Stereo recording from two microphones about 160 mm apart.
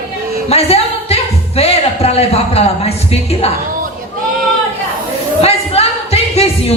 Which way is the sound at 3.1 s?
40° left (ahead or behind).